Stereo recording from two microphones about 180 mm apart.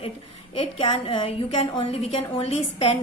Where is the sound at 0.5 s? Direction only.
30° left (ahead or behind).